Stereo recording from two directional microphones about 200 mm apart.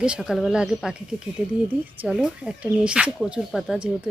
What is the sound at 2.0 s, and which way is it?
Speech, 5° right (ahead or behind).